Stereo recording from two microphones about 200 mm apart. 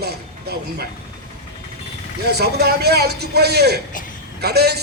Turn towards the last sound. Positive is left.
turn(degrees=-55)  # may be behind; listen again after turning